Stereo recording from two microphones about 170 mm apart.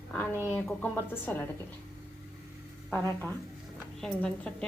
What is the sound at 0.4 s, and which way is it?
Speech, 15° left (ahead or behind).